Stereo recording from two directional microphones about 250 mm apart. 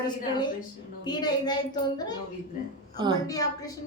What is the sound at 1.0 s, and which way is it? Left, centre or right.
Speech, centre.